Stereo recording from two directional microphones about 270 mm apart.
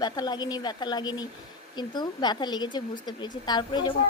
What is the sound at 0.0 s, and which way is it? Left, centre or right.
A child's voice, centre.